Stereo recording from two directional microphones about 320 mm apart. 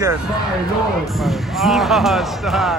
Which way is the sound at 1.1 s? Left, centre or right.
Centre.